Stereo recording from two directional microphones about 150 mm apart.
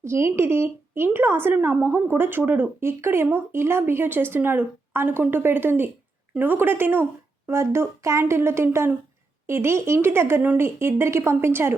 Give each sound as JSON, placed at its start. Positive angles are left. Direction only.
{"t": 0.0, "sound": "a woman's voice", "side_deg": -15}